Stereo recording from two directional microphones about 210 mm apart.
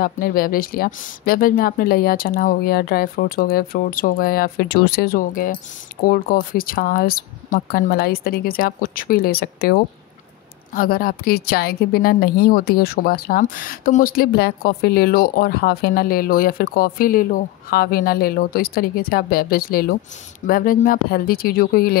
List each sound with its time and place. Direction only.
0.0 s a woman's voice: 45° left (ahead or behind)